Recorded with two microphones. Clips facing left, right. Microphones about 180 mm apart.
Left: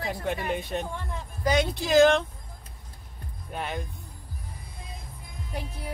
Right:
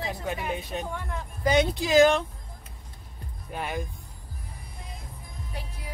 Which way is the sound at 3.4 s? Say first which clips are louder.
Right 1 dB; 5° right (ahead or behind).